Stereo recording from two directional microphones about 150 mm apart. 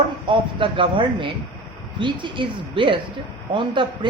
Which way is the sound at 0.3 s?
35° right (ahead or behind).